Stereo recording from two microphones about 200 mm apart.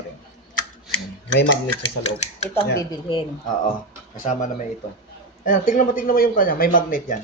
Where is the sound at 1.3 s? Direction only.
65° left (ahead or behind).